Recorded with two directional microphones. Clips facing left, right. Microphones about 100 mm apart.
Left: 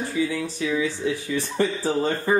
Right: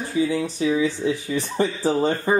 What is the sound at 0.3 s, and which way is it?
Speech, 25° right (ahead or behind).